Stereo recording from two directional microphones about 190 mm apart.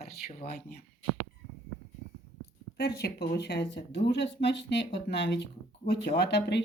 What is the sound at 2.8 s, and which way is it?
Speech, 55° left (ahead or behind).